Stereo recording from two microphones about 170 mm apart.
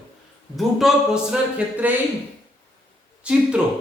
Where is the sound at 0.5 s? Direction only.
Centre (ahead or behind).